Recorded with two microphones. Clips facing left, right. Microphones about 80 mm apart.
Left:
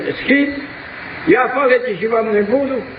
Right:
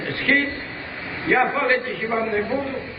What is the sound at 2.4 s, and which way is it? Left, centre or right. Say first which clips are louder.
Speech: left 9 dB; left.